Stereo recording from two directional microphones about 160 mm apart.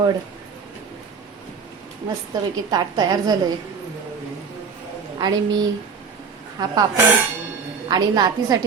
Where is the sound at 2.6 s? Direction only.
25° right (ahead or behind).